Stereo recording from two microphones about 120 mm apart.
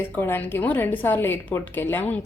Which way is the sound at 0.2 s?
20° left (ahead or behind).